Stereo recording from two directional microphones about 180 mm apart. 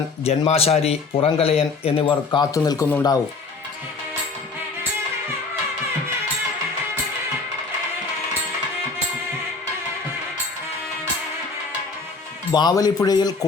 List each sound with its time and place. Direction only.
0.3 s speech: 35° left (ahead or behind); by 3.2 s 20° left (ahead or behind)
12.5 s speech: 20° left (ahead or behind)